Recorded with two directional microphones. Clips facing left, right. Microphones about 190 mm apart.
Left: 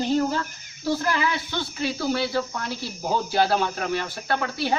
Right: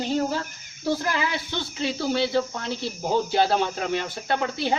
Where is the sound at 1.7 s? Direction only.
25° right (ahead or behind).